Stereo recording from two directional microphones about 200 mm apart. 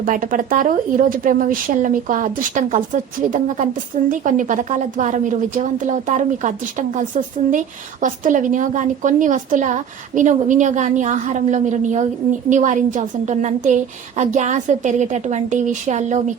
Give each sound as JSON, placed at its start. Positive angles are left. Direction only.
{"t": 0.0, "sound": "a woman's voice", "side_deg": -40}